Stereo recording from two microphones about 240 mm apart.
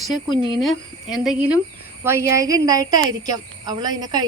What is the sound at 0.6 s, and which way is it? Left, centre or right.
Speech, centre.